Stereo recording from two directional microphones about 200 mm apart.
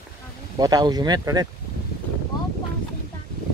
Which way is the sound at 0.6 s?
20° right (ahead or behind).